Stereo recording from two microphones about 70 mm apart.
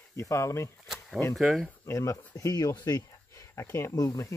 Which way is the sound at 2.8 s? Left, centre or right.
Left.